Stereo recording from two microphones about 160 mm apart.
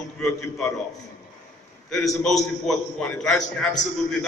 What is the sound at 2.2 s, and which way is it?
A man's voice, 5° left (ahead or behind).